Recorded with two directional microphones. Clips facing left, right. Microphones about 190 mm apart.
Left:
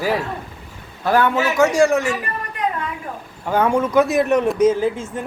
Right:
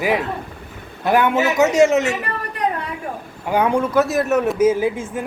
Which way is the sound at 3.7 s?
5° right (ahead or behind).